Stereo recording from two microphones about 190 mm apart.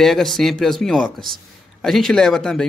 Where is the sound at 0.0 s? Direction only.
Centre (ahead or behind).